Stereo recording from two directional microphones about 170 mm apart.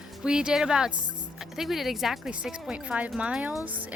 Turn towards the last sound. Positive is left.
turn(degrees=-10)  # may be behind; listen again after turning